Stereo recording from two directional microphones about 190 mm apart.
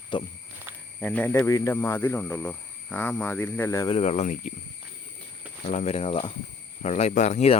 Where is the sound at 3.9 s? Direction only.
35° left (ahead or behind).